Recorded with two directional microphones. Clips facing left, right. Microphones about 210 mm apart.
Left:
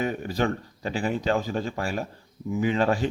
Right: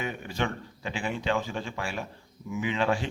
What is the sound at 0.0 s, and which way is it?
A man's voice, 40° left (ahead or behind).